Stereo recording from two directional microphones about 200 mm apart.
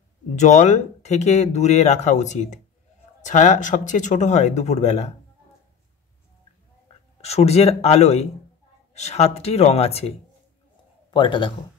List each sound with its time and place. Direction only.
0.4 s speech: 35° left (ahead or behind)
7.2 s a man's voice: 30° left (ahead or behind)